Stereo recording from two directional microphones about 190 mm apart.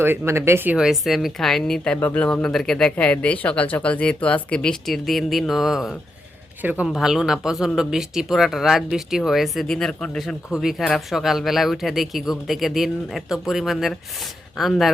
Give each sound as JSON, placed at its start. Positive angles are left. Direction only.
{"t": 0.0, "sound": "speech", "side_deg": -10}